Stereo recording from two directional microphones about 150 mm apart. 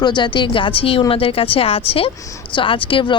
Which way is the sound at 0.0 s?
30° left (ahead or behind).